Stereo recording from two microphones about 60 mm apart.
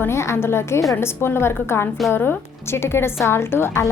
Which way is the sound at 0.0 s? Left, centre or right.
Left.